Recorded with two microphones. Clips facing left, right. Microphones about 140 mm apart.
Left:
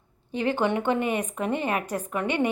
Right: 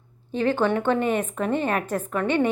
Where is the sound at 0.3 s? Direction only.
15° left (ahead or behind).